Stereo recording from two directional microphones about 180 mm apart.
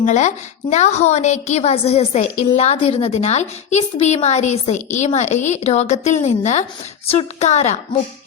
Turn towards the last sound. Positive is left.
turn(degrees=40)  # may be behind; listen again after turning